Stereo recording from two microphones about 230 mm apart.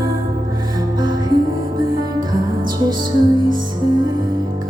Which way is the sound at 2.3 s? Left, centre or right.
Centre.